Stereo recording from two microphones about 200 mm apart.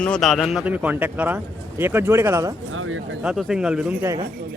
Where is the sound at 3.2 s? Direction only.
5° right (ahead or behind).